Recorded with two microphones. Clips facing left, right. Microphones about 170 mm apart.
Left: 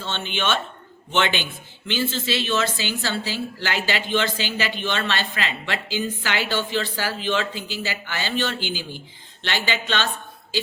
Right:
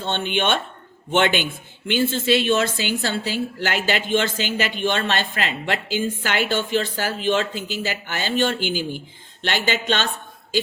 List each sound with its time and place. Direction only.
0.0 s a woman's voice: 55° right (ahead or behind)